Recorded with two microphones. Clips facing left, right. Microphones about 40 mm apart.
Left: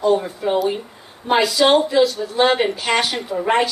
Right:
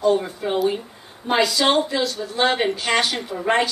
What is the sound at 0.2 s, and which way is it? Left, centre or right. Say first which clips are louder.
A woman's voice: left 2 dB; centre.